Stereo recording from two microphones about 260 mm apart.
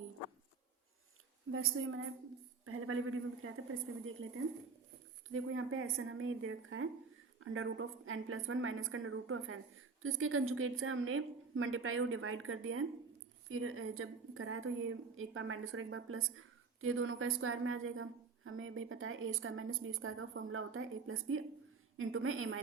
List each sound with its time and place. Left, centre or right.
1.5 s a woman's voice: right
5.3 s a woman's voice: right